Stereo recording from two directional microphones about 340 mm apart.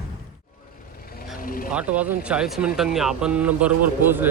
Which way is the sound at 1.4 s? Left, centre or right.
Left.